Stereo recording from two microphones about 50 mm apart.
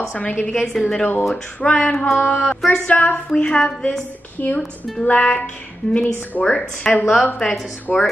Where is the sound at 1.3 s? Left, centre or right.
Left.